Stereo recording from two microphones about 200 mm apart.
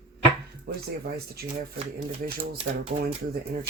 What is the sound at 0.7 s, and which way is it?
Speech, 50° right (ahead or behind).